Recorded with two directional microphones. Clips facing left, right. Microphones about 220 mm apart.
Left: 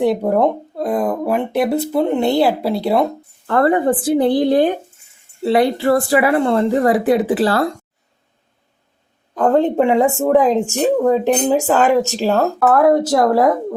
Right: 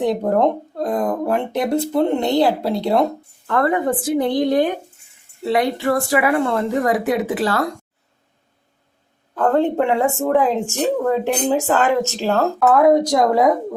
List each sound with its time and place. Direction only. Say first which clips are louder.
0.2 s a sound: left 1 dB; 5° left (ahead or behind)
1.6 s speech: left 1 dB; 5° left (ahead or behind)
3.4 s a woman's voice: left 4 dB; 35° left (ahead or behind)
9.3 s speech: left 3 dB; 15° left (ahead or behind)
12.6 s speech: even; 5° left (ahead or behind)